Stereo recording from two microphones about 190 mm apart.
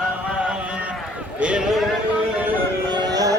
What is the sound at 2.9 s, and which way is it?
Music, 20° right (ahead or behind).